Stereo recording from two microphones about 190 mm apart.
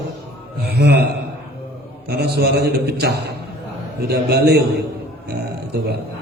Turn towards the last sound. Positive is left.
turn(degrees=-60)  # may be behind; listen again after turning